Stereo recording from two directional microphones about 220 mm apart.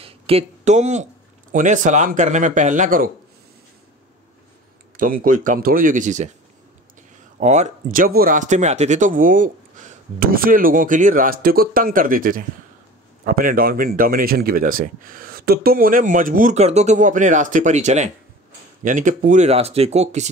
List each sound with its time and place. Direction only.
0.0 s a sound: 25° right (ahead or behind)
1.5 s speech: 35° right (ahead or behind)
4.9 s speech: 40° right (ahead or behind)
7.3 s speech: 30° right (ahead or behind)